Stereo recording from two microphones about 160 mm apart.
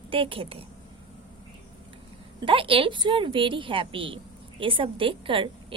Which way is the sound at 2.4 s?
35° right (ahead or behind).